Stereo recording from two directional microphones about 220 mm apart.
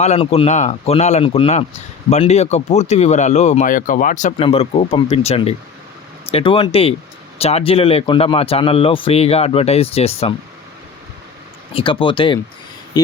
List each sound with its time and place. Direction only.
0.0 s speech: 30° left (ahead or behind)
11.7 s speech: 25° left (ahead or behind)